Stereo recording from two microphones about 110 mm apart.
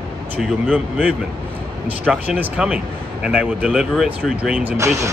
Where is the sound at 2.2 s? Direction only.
10° right (ahead or behind).